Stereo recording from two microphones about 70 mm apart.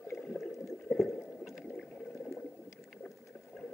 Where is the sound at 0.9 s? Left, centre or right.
Centre.